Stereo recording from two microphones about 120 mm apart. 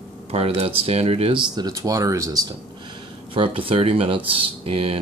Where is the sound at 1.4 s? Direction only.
35° right (ahead or behind).